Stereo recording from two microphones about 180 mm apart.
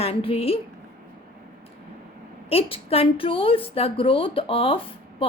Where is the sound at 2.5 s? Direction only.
35° left (ahead or behind).